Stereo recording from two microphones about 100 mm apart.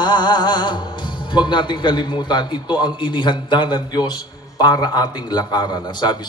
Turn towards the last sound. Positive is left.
turn(degrees=45)  # may be behind; listen again after turning